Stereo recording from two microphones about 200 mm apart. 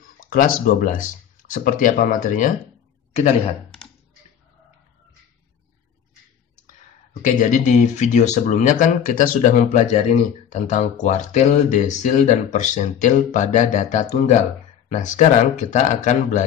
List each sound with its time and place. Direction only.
0.2 s a man's voice: 45° left (ahead or behind)
6.7 s speech: 40° left (ahead or behind)